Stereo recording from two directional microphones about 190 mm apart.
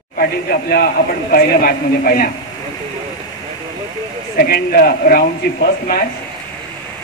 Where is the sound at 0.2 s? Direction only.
55° left (ahead or behind).